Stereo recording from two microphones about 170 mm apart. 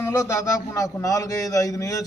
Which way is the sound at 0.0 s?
15° left (ahead or behind).